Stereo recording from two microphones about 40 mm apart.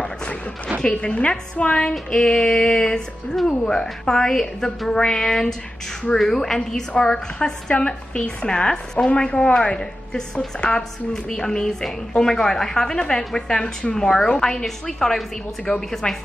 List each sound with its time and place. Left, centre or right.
0.7 s a woman's voice: left
7.7 s a woman's voice: left
10.5 s a woman's voice: centre
11.2 s a woman's voice: centre